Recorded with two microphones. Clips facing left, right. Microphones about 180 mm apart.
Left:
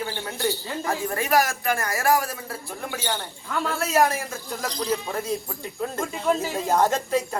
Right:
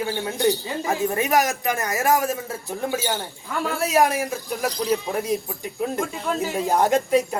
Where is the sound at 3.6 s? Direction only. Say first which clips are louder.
Right 2 dB; 15° right (ahead or behind).